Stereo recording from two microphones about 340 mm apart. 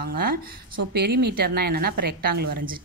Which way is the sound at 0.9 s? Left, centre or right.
Right.